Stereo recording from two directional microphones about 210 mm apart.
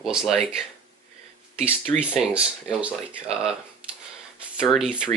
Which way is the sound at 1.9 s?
5° right (ahead or behind).